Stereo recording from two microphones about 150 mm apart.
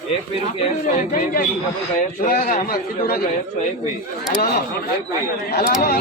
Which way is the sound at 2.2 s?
65° left (ahead or behind).